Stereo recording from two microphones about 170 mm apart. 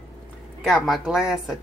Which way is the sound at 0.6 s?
Centre (ahead or behind).